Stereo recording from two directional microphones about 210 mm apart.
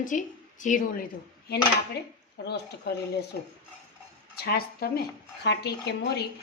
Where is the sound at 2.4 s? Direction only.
50° left (ahead or behind).